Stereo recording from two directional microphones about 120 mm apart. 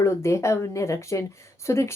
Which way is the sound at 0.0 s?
25° left (ahead or behind).